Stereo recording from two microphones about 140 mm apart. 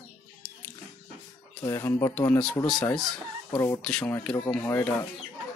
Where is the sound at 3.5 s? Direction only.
20° left (ahead or behind).